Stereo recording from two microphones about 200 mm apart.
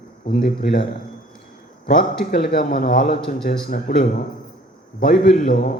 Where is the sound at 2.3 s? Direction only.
45° left (ahead or behind).